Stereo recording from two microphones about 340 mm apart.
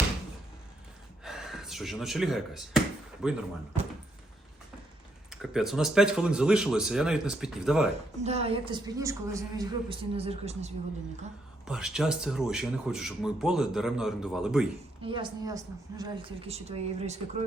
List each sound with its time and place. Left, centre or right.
1.2 s speech: centre
5.3 s speech: centre
8.2 s a woman's voice: centre
11.7 s speech: centre
15.0 s a woman's voice: centre